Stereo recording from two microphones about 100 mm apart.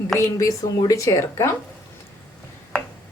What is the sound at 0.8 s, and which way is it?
Speech, 35° left (ahead or behind).